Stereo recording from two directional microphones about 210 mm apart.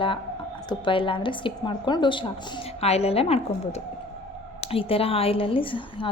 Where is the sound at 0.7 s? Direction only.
25° left (ahead or behind).